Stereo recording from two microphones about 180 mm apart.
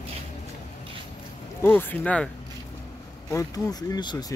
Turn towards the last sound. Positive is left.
turn(degrees=25)  # may be behind; listen again after turning